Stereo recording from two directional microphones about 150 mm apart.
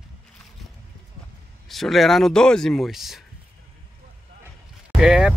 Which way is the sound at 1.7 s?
Centre (ahead or behind).